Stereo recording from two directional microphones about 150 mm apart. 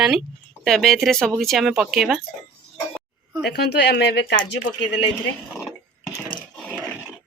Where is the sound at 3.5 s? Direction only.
90° left.